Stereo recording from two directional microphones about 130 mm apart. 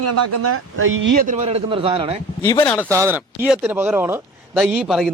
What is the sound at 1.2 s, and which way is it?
Speech, 60° right (ahead or behind).